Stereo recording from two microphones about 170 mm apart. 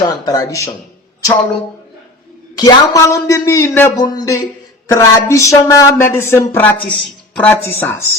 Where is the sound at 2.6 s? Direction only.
20° left (ahead or behind).